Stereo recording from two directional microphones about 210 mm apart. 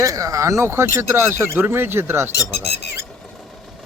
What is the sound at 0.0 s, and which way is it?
A man's voice, 15° right (ahead or behind).